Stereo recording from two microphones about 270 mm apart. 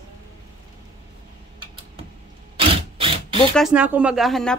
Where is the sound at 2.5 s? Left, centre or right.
Centre.